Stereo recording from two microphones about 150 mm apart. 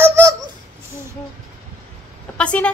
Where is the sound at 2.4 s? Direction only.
10° left (ahead or behind).